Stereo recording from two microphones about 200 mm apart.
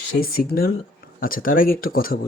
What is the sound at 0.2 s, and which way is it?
Speech, 50° left (ahead or behind).